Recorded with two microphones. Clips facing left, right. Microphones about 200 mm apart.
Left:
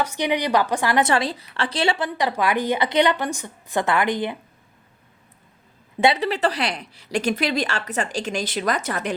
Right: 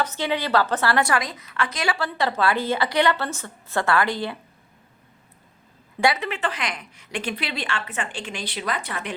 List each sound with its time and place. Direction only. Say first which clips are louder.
0.0 s a woman's voice: left 2 dB; 15° left (ahead or behind)
2.0 s a woman's voice: left 1 dB; 15° left (ahead or behind)
6.0 s a woman's voice: left 4 dB; 30° left (ahead or behind)